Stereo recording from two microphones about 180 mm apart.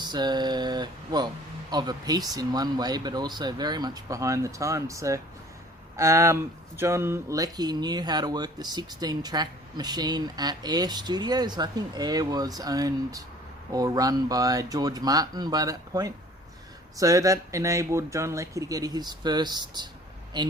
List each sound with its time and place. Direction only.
0.0 s speech: 25° right (ahead or behind)